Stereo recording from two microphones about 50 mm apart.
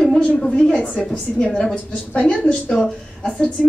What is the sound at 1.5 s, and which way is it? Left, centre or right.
Speech, centre.